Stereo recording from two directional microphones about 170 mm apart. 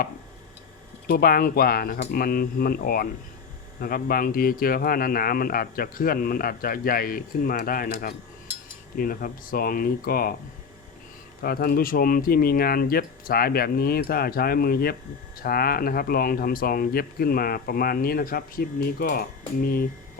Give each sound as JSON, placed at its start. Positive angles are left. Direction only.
{"t": 1.0, "sound": "speech", "side_deg": 60}
{"t": 11.4, "sound": "speech", "side_deg": 65}